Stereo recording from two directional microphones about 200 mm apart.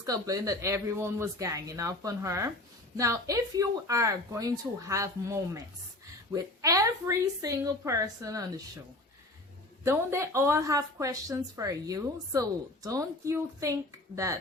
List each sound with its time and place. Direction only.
0.0 s a woman's voice: 15° right (ahead or behind)
9.8 s a woman's voice: 15° right (ahead or behind)